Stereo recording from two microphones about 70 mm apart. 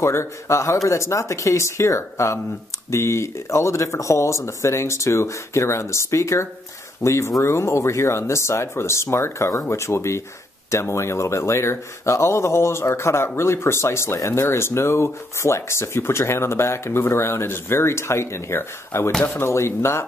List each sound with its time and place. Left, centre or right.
0.0 s speech: left